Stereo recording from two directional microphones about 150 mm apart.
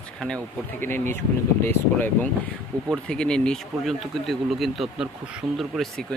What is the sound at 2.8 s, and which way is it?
Speech, 5° left (ahead or behind).